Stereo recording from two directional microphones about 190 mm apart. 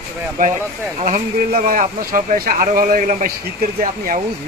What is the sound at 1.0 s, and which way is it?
Speech, 45° right (ahead or behind).